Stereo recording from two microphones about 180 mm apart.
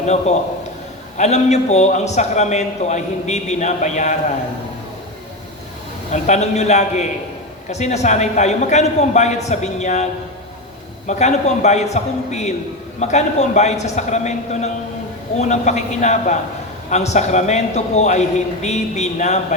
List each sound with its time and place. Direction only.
0.0 s a man's voice: 40° left (ahead or behind)
6.1 s a man's voice: 40° left (ahead or behind)